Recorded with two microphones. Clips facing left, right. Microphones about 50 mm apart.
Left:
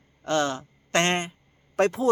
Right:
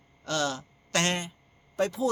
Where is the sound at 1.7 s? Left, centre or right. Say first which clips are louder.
Left 5 dB; left.